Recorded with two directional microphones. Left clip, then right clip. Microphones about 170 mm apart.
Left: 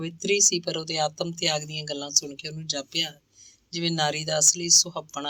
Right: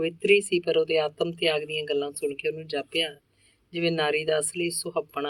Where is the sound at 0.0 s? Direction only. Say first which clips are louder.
Right 2 dB; 35° left (ahead or behind).